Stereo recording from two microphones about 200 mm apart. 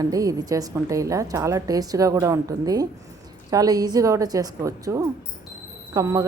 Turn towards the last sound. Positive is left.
turn(degrees=-15)  # may be behind; listen again after turning